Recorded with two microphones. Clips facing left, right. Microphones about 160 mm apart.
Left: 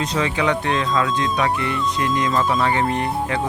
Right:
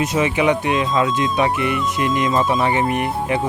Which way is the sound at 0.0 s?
20° right (ahead or behind).